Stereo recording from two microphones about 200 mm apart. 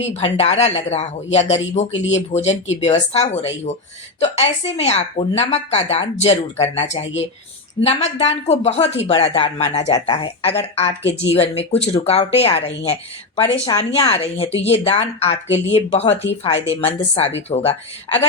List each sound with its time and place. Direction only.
0.0 s a woman's voice: 35° left (ahead or behind)